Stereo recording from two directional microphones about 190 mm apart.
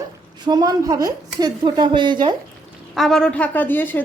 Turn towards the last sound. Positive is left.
turn(degrees=10)  # may be behind; listen again after turning